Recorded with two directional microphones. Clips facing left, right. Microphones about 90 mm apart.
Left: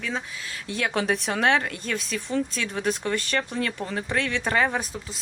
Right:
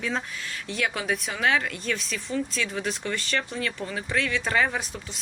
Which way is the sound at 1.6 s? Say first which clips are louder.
Right 1 dB; 30° left (ahead or behind).